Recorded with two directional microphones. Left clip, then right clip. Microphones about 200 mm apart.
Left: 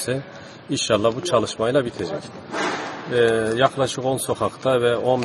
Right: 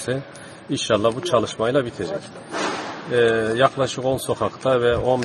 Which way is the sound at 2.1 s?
45° right (ahead or behind).